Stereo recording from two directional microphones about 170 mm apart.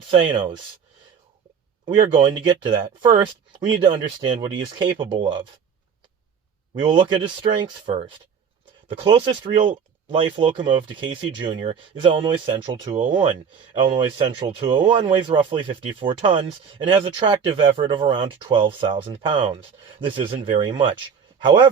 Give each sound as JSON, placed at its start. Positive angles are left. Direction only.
{"t": 0.1, "sound": "speech", "side_deg": -30}
{"t": 2.1, "sound": "speech", "side_deg": -25}
{"t": 6.7, "sound": "speech", "side_deg": -30}